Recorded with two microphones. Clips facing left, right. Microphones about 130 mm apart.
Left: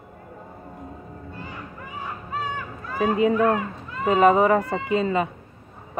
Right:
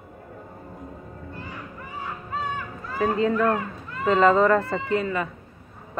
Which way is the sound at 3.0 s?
20° left (ahead or behind).